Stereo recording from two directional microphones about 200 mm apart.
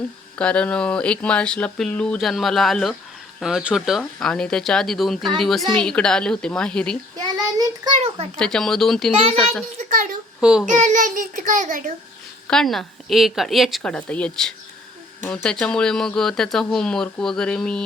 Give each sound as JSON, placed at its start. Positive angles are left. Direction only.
{"t": 0.3, "sound": "speech", "side_deg": 5}
{"t": 7.3, "sound": "child singing", "side_deg": -20}
{"t": 8.4, "sound": "speech", "side_deg": 5}
{"t": 9.7, "sound": "a sound", "side_deg": -40}
{"t": 10.4, "sound": "speech", "side_deg": -5}
{"t": 10.7, "sound": "a child's voice", "side_deg": -35}
{"t": 12.5, "sound": "speech", "side_deg": 0}